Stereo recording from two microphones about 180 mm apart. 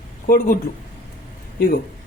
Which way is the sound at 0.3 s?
50° left (ahead or behind).